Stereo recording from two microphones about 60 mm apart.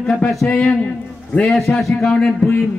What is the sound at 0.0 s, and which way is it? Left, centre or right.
A man's voice, centre.